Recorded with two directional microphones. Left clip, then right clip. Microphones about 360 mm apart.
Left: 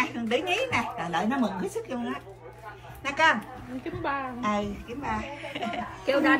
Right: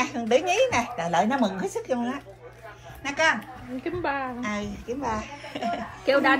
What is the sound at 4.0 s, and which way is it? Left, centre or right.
Speech, right.